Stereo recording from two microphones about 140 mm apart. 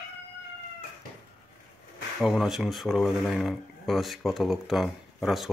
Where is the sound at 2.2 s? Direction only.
Centre (ahead or behind).